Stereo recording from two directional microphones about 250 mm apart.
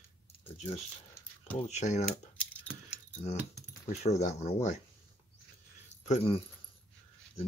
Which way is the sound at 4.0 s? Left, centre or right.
Left.